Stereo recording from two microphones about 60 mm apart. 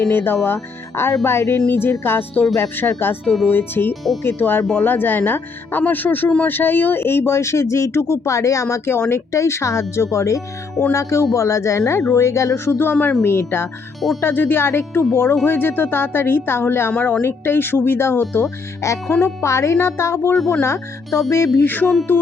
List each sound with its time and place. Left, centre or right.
0.1 s speech: left
13.2 s speech: left
18.8 s speech: left